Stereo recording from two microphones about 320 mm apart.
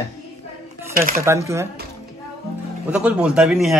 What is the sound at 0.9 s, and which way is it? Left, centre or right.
Speech, right.